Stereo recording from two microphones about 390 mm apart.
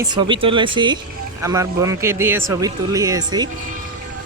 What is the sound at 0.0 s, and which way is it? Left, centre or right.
Speech, centre.